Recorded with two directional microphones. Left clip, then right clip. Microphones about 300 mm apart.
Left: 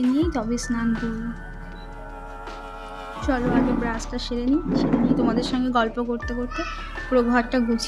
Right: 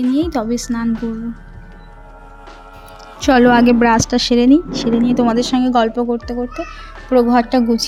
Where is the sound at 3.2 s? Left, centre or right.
Right.